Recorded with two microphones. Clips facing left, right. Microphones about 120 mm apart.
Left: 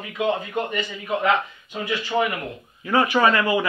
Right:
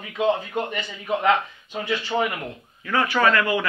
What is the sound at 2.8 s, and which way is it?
Speech, 20° left (ahead or behind).